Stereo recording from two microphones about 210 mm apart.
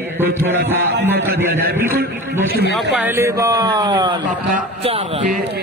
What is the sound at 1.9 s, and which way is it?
Speech, 45° right (ahead or behind).